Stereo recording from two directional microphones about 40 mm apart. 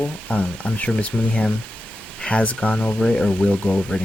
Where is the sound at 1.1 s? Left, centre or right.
Centre.